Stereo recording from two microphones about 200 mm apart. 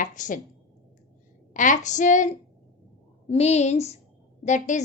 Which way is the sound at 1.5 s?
40° left (ahead or behind).